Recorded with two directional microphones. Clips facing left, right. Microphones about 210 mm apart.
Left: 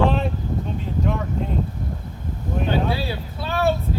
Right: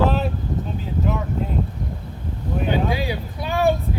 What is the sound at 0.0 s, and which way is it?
Vehicle, centre (ahead or behind).